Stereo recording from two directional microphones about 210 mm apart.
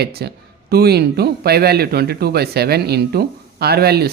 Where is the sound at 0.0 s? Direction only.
50° right (ahead or behind).